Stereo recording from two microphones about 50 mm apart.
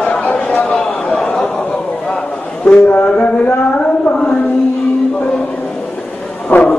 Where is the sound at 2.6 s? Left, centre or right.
Left.